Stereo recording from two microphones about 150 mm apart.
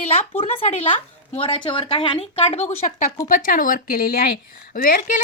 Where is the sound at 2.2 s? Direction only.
40° left (ahead or behind).